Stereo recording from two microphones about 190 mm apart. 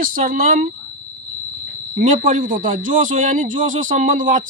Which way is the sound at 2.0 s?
40° right (ahead or behind).